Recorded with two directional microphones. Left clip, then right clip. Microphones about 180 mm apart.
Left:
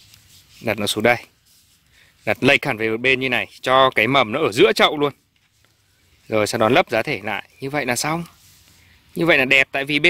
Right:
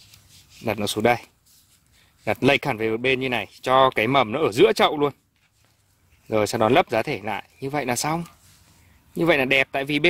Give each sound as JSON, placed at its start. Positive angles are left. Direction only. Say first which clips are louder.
{"t": 0.6, "sound": "speech", "louder": "left 3 dB", "side_deg": 0}
{"t": 6.2, "sound": "speech", "louder": "left 3 dB", "side_deg": 0}